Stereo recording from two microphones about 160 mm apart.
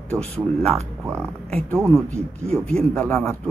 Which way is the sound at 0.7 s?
15° right (ahead or behind).